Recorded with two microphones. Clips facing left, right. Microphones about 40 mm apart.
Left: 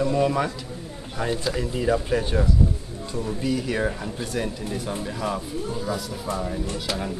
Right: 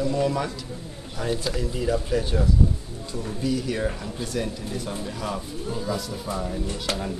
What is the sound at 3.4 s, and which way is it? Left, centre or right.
Speech, centre.